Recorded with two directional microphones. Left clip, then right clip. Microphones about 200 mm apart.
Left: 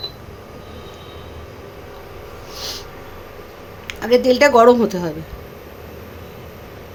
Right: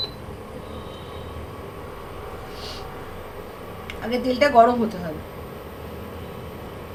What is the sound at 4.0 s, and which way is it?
A woman's voice, 60° left (ahead or behind).